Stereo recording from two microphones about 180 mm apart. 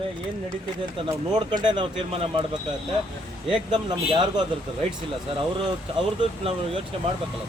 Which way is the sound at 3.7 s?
25° right (ahead or behind).